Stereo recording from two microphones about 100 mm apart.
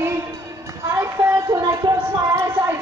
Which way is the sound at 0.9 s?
30° right (ahead or behind).